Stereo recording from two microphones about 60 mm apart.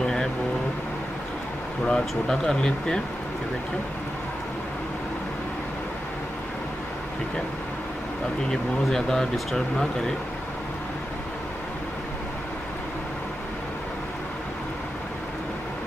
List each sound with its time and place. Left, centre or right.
0.0 s vehicle: centre
1.9 s speech: centre
8.8 s speech: centre